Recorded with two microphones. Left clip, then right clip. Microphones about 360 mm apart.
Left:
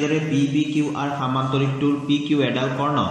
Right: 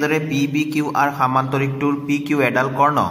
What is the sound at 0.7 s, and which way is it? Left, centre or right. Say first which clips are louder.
Speech: right 6 dB; right.